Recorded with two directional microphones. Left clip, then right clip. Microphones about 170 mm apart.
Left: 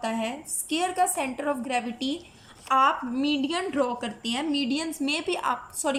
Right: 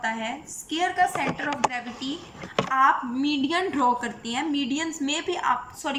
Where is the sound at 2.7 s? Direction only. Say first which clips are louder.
Even; 20° left (ahead or behind).